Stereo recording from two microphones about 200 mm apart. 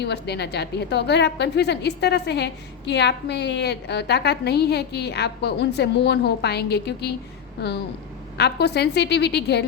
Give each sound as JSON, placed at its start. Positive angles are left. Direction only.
{"t": 0.0, "sound": "a woman's voice", "side_deg": 55}
{"t": 8.4, "sound": "a woman's voice", "side_deg": 55}